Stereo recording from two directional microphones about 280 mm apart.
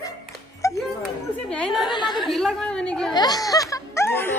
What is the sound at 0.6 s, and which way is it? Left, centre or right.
Music, centre.